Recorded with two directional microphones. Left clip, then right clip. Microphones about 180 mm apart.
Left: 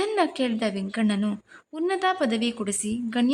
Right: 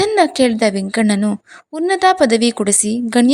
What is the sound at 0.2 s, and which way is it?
A woman's voice, 35° right (ahead or behind).